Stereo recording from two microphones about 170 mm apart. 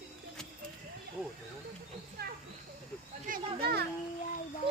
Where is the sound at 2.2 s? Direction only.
65° right (ahead or behind).